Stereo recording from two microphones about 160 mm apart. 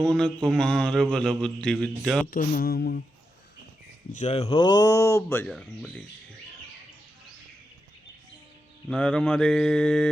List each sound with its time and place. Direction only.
0.0 s a man's voice: 5° left (ahead or behind)
2.3 s mantra: 60° left (ahead or behind); by 3.0 s 75° left (ahead or behind)
4.1 s speech: 45° left (ahead or behind); by 5.5 s 15° left (ahead or behind)
5.5 s a man's voice: 5° right (ahead or behind)
8.9 s a man's voice: 5° left (ahead or behind)